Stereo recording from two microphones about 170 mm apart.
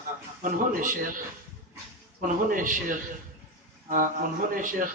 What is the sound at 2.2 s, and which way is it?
Speech, 50° right (ahead or behind).